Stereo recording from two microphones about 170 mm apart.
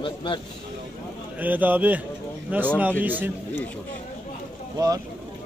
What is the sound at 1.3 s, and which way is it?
A man's voice, 10° right (ahead or behind).